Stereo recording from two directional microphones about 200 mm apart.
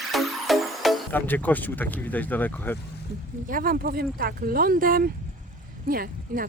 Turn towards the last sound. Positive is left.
turn(degrees=-45)  # may be behind; listen again after turning